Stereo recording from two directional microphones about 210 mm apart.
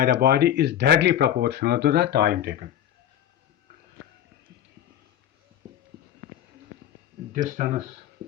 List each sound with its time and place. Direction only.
0.0 s speech: 50° right (ahead or behind)
7.3 s speech: 35° right (ahead or behind)